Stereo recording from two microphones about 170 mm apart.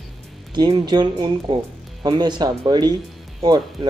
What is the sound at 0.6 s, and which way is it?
Speech, 25° right (ahead or behind).